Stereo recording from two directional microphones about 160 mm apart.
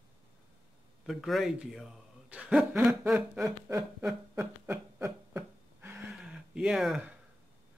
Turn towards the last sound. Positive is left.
turn(degrees=0)  # may be behind; listen again after turning